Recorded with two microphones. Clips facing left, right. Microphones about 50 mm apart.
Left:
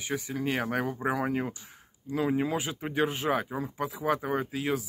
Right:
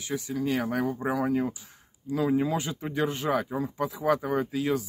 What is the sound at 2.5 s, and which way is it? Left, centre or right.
Speech, centre.